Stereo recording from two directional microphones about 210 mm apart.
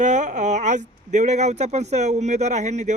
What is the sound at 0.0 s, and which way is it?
Speech, 35° right (ahead or behind).